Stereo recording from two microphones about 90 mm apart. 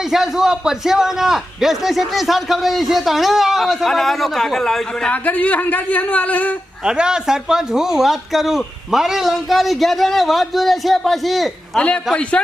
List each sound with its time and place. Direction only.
0.1 s a man's voice: 5° right (ahead or behind)
5.1 s speech: 15° left (ahead or behind)
6.8 s a man's voice: 10° right (ahead or behind)